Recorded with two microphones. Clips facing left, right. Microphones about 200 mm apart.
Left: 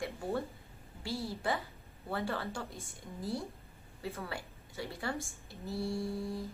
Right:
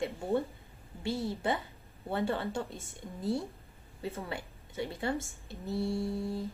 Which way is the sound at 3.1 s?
Centre (ahead or behind).